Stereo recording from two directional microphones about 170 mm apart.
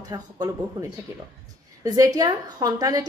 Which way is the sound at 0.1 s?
20° right (ahead or behind).